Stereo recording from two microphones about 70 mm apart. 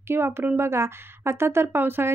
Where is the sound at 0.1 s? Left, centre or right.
Right.